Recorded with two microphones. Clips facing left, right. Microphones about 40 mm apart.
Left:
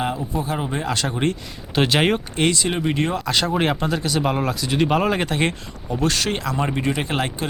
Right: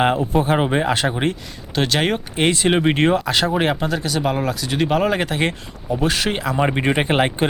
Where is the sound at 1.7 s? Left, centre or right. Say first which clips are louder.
Left 1 dB; centre.